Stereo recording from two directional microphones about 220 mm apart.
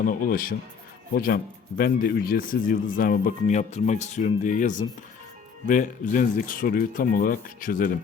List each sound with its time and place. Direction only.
0.0 s speech: 40° left (ahead or behind)